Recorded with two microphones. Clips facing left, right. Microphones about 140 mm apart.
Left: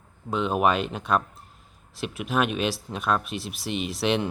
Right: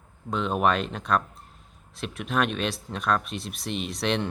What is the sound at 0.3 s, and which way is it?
Speech, 5° left (ahead or behind).